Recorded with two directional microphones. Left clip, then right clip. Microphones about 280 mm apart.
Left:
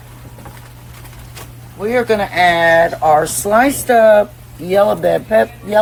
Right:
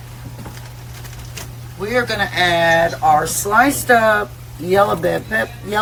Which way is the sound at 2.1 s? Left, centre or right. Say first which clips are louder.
Left 6 dB; left.